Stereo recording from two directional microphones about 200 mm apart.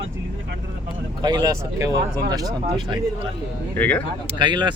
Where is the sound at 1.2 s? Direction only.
20° right (ahead or behind).